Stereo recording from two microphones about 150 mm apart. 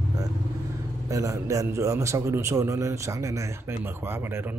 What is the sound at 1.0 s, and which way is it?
A man's voice, 20° right (ahead or behind).